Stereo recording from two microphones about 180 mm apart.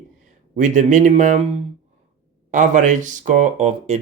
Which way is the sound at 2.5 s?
45° right (ahead or behind).